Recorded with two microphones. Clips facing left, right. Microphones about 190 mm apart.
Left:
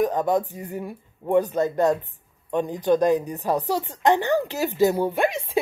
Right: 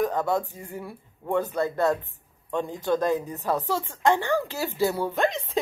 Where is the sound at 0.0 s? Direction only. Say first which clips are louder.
Left 3 dB; 15° left (ahead or behind).